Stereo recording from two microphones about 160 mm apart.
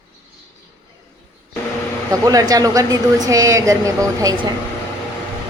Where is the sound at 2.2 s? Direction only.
20° right (ahead or behind).